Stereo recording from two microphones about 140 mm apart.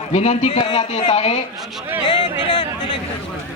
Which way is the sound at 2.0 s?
35° left (ahead or behind).